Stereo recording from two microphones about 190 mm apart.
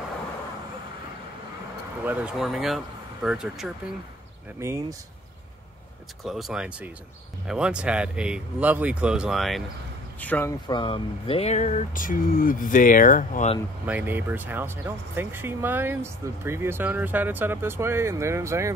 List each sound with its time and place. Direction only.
2.0 s speech: 5° right (ahead or behind)
4.6 s speech: 15° right (ahead or behind)
6.2 s speech: centre (ahead or behind)
10.7 s speech: 25° left (ahead or behind); by 13.5 s 45° left (ahead or behind)
13.8 s speech: 10° right (ahead or behind)